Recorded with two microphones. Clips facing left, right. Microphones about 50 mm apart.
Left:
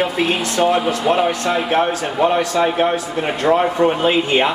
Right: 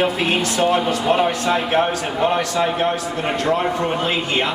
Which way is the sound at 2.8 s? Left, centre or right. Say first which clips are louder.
Left 3 dB; centre.